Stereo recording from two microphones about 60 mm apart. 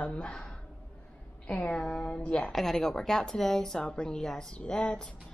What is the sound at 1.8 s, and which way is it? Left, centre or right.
A woman's voice, centre.